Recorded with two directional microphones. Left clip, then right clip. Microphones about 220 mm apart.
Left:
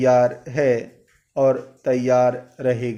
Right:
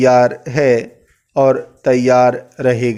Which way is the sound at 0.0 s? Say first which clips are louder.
Right 6 dB; 45° right (ahead or behind).